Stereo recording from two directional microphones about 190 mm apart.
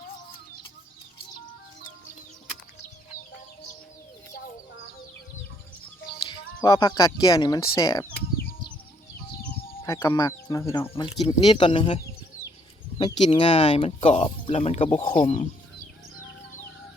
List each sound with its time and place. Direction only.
6.2 s speech: 20° left (ahead or behind)
9.8 s speech: 15° left (ahead or behind)
13.0 s speech: 25° left (ahead or behind)